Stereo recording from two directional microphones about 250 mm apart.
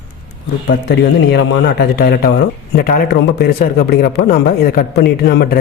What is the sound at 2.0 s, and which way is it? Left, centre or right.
Speech, left.